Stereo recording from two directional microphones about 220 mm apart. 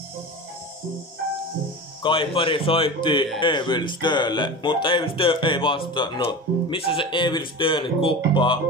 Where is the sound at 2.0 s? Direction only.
25° left (ahead or behind).